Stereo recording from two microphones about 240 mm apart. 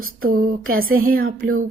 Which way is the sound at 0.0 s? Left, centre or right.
Right.